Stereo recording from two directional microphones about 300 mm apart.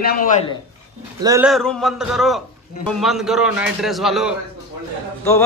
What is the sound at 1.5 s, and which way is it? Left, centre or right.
A man's voice, centre.